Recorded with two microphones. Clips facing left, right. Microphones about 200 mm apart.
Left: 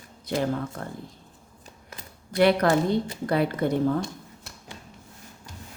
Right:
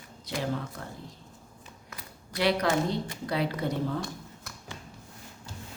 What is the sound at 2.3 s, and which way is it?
A woman's voice, 50° left (ahead or behind).